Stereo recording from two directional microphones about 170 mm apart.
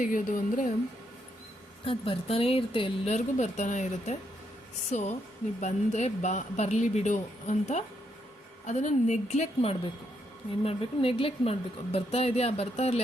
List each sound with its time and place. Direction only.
0.0 s speech: 50° left (ahead or behind)
1.8 s a woman's voice: 35° left (ahead or behind)
3.2 s a woman's voice: 45° left (ahead or behind)